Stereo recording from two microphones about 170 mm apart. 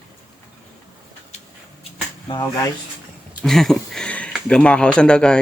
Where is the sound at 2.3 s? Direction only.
25° left (ahead or behind).